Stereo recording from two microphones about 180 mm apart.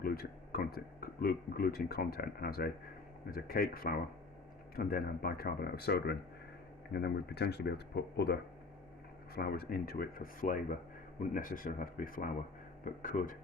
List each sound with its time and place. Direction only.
0.0 s speech: 55° left (ahead or behind)